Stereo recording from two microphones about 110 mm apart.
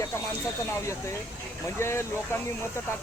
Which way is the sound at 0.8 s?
25° left (ahead or behind).